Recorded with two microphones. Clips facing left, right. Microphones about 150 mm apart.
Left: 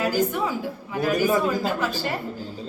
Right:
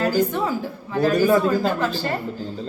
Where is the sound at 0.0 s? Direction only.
10° left (ahead or behind).